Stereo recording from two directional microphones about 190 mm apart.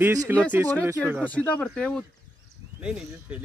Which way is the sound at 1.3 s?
5° left (ahead or behind).